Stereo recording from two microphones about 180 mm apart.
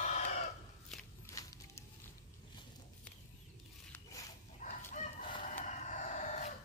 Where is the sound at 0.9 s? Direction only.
Centre (ahead or behind).